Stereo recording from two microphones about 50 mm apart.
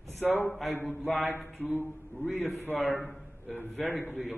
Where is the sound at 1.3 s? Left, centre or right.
Left.